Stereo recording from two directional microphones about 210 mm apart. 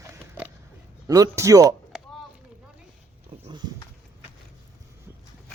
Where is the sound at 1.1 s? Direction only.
15° right (ahead or behind).